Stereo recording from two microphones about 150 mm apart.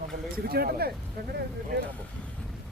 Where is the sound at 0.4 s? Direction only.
90° right.